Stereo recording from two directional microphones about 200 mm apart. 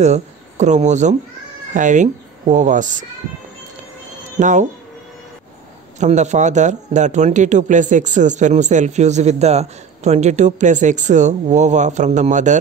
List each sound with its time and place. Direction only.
0.0 s a man's voice: 35° right (ahead or behind)
4.4 s a man's voice: 40° right (ahead or behind)
5.9 s a man's voice: 35° right (ahead or behind)